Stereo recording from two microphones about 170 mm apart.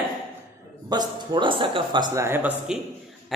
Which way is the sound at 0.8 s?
25° right (ahead or behind).